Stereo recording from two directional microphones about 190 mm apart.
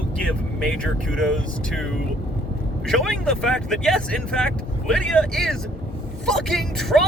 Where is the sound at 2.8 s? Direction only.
5° left (ahead or behind).